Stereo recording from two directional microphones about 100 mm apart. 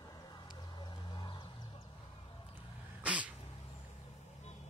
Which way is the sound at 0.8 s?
50° left (ahead or behind).